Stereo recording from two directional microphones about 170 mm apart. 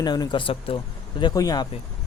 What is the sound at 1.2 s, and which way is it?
Speech, 20° left (ahead or behind).